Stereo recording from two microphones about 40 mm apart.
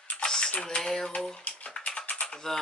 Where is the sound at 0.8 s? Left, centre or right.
Centre.